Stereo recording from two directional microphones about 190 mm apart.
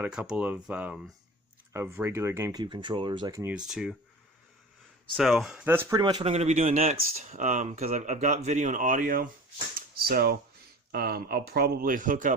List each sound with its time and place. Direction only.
0.0 s speech: 5° right (ahead or behind)
3.5 s speech: 5° right (ahead or behind)
5.1 s speech: centre (ahead or behind); by 6.2 s 20° right (ahead or behind)
6.2 s speech: 35° right (ahead or behind)
9.9 s cutlery: 55° right (ahead or behind)
10.9 s speech: 55° right (ahead or behind)